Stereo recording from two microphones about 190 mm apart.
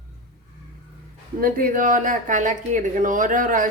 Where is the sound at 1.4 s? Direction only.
50° right (ahead or behind).